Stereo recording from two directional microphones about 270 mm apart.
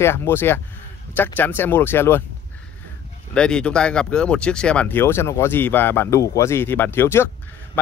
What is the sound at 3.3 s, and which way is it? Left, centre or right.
Speech, centre.